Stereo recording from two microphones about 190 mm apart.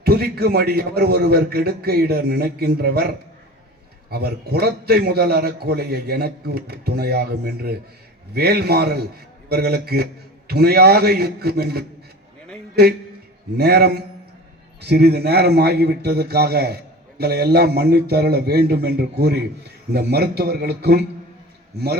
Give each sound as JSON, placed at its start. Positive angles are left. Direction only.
{"t": 0.0, "sound": "a man's voice", "side_deg": -55}
{"t": 4.1, "sound": "a man's voice", "side_deg": -55}
{"t": 13.6, "sound": "a man's voice", "side_deg": -55}